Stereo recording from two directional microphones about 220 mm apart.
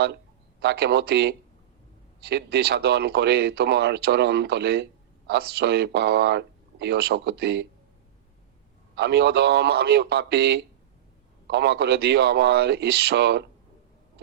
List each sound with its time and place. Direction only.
0.6 s speech: 50° right (ahead or behind)
9.0 s speech: 50° right (ahead or behind)